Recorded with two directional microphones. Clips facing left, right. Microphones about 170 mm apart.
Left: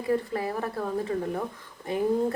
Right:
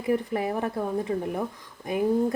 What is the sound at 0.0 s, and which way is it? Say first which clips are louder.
A woman's voice: right 1 dB; 20° right (ahead or behind).